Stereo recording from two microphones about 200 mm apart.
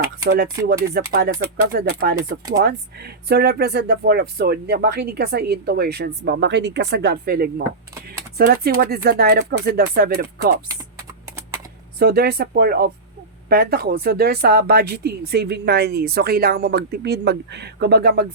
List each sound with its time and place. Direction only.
1.1 s speech: 50° right (ahead or behind)
11.9 s speech: 50° right (ahead or behind)